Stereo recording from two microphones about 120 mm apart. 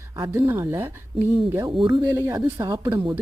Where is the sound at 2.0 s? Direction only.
30° right (ahead or behind).